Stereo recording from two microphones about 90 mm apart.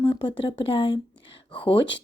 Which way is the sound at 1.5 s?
85° left.